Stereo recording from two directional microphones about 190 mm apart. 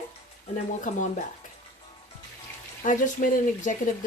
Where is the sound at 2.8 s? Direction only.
40° left (ahead or behind).